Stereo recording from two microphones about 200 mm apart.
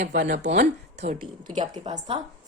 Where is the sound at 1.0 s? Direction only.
35° right (ahead or behind).